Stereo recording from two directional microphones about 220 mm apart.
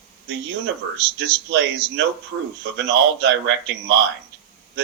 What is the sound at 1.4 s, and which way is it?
Speech, 55° right (ahead or behind).